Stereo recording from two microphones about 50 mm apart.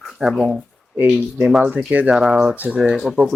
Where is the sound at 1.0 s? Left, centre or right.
Centre.